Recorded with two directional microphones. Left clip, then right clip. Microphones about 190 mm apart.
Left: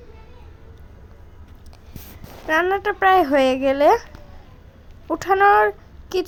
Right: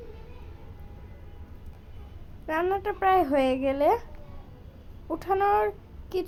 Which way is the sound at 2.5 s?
20° left (ahead or behind).